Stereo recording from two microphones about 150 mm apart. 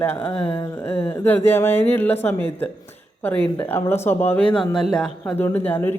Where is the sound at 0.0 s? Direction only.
15° left (ahead or behind).